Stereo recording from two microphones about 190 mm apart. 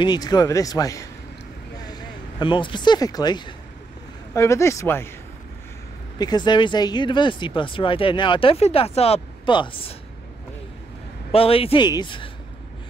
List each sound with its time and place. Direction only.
0.0 s speech: 20° left (ahead or behind)
6.1 s speech: 20° left (ahead or behind)
11.3 s speech: 30° left (ahead or behind)